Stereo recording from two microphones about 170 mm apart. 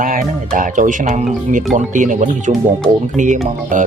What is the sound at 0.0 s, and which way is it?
Speech, 50° right (ahead or behind).